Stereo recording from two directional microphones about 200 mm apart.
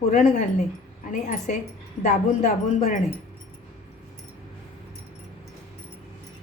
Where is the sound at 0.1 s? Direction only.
35° left (ahead or behind).